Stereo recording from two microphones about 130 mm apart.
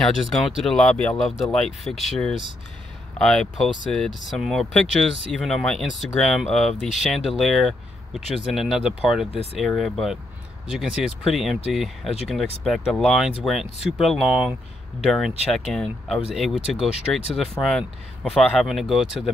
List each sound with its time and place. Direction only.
0.0 s speech: centre (ahead or behind)
9.3 s speech: 50° left (ahead or behind)
9.6 s speech: centre (ahead or behind)